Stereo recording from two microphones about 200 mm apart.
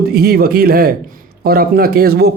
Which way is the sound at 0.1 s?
50° right (ahead or behind).